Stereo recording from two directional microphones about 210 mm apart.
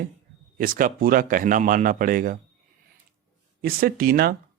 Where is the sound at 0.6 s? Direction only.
40° right (ahead or behind).